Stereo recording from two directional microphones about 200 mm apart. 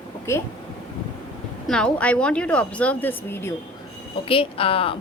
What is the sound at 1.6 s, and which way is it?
Speech, 5° left (ahead or behind).